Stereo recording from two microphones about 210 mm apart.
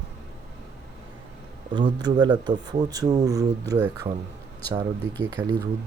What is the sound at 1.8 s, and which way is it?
Speech, 20° right (ahead or behind).